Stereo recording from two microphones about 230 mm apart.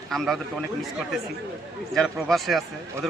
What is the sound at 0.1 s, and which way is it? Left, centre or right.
Speech, centre.